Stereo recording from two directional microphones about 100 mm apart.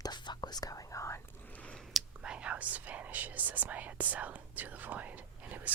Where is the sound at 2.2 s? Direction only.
10° right (ahead or behind).